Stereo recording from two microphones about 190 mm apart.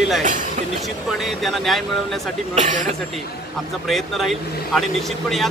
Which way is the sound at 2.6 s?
40° right (ahead or behind).